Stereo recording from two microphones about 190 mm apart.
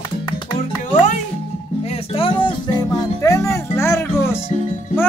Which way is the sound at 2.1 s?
30° left (ahead or behind).